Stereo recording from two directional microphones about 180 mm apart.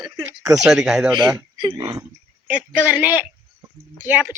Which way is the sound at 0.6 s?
Centre (ahead or behind).